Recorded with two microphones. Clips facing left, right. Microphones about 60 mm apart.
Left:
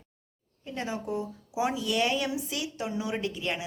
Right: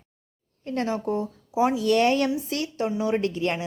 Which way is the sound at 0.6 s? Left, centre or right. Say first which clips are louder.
Right 7 dB; right.